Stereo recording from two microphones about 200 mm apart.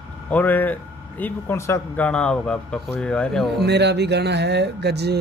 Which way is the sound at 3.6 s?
60° right (ahead or behind).